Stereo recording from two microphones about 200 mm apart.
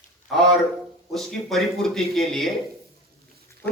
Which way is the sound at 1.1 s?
Centre (ahead or behind).